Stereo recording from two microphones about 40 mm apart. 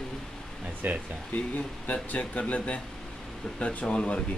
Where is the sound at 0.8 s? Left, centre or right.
Right.